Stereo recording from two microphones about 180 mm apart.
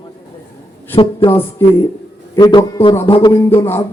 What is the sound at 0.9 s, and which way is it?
Speech, 30° left (ahead or behind).